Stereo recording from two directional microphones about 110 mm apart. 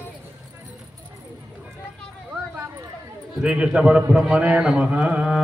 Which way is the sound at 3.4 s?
10° right (ahead or behind).